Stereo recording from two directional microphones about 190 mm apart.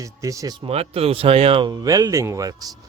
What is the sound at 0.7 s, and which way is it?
Speech, 30° right (ahead or behind).